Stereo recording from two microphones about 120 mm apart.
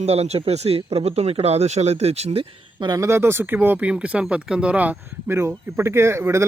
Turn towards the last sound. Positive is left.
turn(degrees=-20)  # may be behind; listen again after turning